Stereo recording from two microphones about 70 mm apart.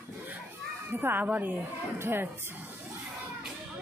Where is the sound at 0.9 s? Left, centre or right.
Right.